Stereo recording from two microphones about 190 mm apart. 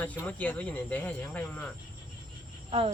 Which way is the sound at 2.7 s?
30° right (ahead or behind).